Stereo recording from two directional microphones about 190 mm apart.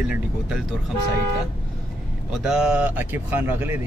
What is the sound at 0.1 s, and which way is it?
Speech, 5° right (ahead or behind).